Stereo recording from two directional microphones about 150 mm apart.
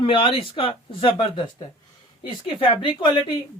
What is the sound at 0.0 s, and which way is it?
Speech, 35° left (ahead or behind).